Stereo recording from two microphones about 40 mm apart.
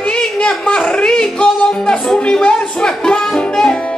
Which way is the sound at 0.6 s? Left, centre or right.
Left.